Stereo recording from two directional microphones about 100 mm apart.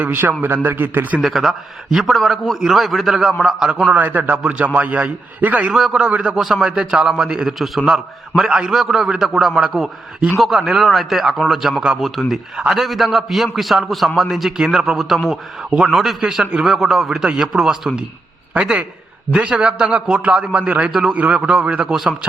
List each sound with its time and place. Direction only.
0.0 s a man's voice: 20° right (ahead or behind)
1.2 s a man's voice: centre (ahead or behind)
5.7 s a man's voice: 5° right (ahead or behind)